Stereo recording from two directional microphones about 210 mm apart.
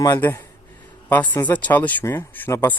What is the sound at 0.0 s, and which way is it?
Speech, 15° left (ahead or behind).